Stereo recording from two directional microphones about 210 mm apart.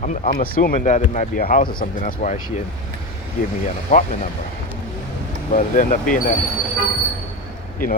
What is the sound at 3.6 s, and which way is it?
Speech, 35° left (ahead or behind).